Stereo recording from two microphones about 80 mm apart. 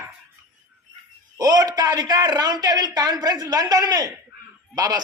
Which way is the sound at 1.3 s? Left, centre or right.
Right.